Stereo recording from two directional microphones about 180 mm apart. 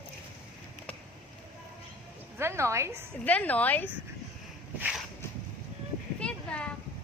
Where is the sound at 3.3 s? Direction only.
10° left (ahead or behind).